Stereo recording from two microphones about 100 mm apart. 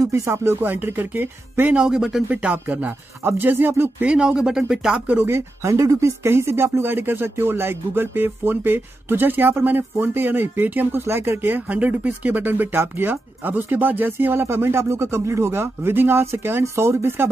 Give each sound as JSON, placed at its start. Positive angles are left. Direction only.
{"t": 0.0, "sound": "speech", "side_deg": -30}
{"t": 2.2, "sound": "speech", "side_deg": -15}
{"t": 4.1, "sound": "speech", "side_deg": -10}